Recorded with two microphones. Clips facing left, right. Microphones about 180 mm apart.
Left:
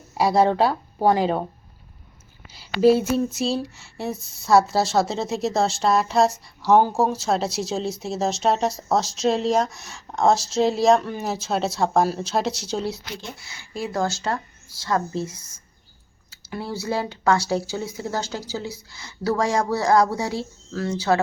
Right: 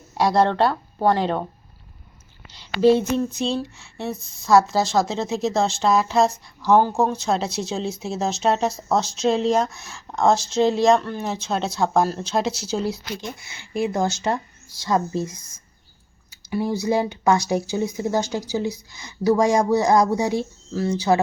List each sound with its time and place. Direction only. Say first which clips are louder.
0.1 s speech: even; 5° left (ahead or behind)
2.5 s speech: even; 5° left (ahead or behind)
13.8 s speech: right 2 dB; 20° right (ahead or behind)